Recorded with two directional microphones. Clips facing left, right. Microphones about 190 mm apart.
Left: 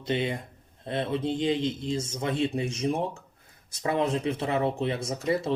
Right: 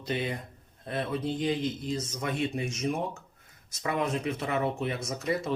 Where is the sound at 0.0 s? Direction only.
25° left (ahead or behind).